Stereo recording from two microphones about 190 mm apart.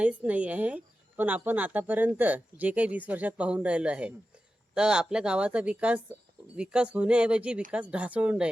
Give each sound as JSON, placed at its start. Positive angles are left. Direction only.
{"t": 0.0, "sound": "a woman's voice", "side_deg": -5}